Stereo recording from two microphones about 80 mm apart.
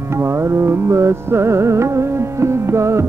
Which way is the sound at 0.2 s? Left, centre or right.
Right.